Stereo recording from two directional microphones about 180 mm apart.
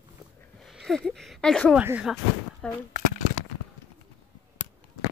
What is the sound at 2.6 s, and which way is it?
Speech, 5° left (ahead or behind).